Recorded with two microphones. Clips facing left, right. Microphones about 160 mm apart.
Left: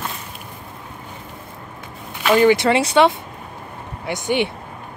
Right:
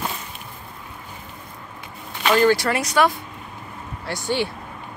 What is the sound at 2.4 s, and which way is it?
Speech, 20° left (ahead or behind).